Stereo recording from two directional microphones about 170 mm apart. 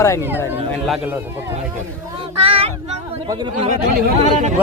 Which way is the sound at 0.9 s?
10° right (ahead or behind).